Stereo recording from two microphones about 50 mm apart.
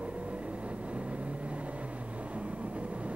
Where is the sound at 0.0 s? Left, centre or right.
Right.